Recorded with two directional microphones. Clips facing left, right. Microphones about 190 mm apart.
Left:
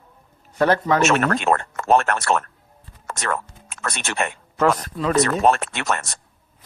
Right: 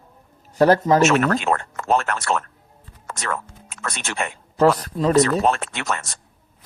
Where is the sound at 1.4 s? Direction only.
55° left (ahead or behind).